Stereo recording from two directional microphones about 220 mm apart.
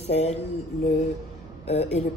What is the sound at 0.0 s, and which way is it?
Speech, 30° left (ahead or behind).